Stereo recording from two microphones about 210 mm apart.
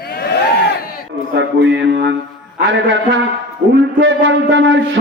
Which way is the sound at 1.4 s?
60° right (ahead or behind).